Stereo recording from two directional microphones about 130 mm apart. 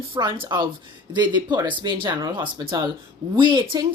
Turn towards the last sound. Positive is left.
turn(degrees=-40)  # may be behind; listen again after turning